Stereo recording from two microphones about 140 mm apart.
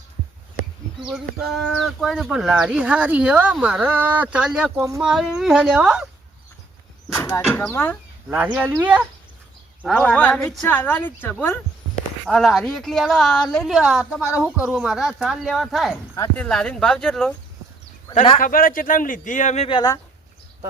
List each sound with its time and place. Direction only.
1.0 s a woman's voice: centre (ahead or behind)
7.1 s a sound: 15° left (ahead or behind)
7.7 s a woman's voice: 15° left (ahead or behind)
8.5 s speech: 15° right (ahead or behind)
9.8 s a woman's voice: 5° left (ahead or behind)
12.3 s a woman's voice: centre (ahead or behind)
18.3 s speech: 80° left; by 19.6 s 60° left (ahead or behind)
19.6 s speech: 30° left (ahead or behind)